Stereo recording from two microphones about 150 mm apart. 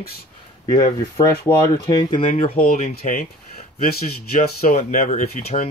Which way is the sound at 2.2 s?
40° left (ahead or behind).